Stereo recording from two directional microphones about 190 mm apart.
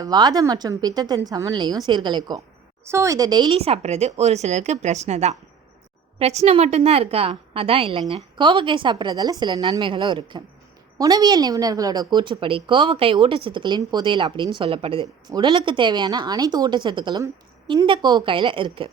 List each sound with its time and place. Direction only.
0.0 s a woman's voice: 20° right (ahead or behind)